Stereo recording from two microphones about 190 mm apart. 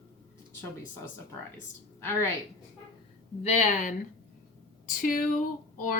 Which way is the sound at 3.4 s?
40° left (ahead or behind).